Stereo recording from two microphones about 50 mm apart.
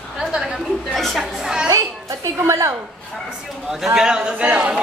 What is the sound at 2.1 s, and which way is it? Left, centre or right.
Speech, right.